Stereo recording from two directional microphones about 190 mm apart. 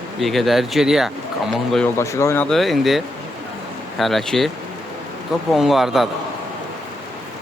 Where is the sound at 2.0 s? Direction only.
15° left (ahead or behind).